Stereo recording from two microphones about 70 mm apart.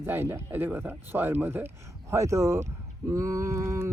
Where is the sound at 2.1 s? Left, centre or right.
Right.